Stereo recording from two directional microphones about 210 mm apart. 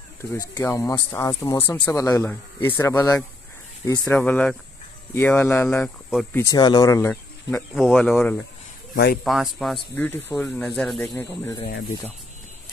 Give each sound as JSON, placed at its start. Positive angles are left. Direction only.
{"t": 0.3, "sound": "speech", "side_deg": 15}
{"t": 4.0, "sound": "speech", "side_deg": 5}
{"t": 7.7, "sound": "speech", "side_deg": 0}
{"t": 8.9, "sound": "speech", "side_deg": 50}
{"t": 9.2, "sound": "speech", "side_deg": 0}